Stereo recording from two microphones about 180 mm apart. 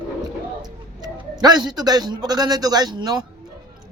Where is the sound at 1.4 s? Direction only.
20° right (ahead or behind).